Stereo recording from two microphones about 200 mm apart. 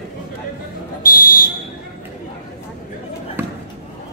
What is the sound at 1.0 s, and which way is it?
Fire alarm, 45° left (ahead or behind).